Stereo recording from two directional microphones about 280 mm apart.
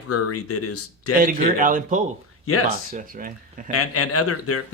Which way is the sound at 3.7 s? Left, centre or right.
Left.